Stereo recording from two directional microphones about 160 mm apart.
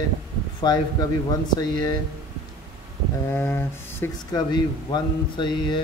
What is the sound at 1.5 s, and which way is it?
Speech, 25° left (ahead or behind).